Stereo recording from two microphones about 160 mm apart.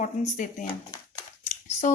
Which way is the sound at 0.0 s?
50° left (ahead or behind).